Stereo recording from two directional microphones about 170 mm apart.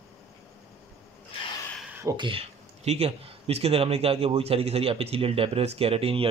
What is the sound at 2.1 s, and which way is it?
Speech, 30° right (ahead or behind).